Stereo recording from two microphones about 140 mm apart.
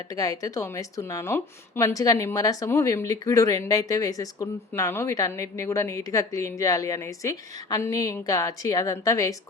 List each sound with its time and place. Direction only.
0.1 s speech: 25° left (ahead or behind)